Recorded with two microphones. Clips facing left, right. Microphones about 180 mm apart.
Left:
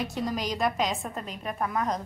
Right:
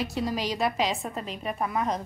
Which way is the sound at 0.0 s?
5° right (ahead or behind).